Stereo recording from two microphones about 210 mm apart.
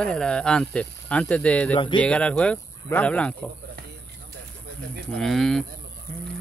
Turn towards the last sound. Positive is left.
turn(degrees=0)  # may be behind; listen again after turning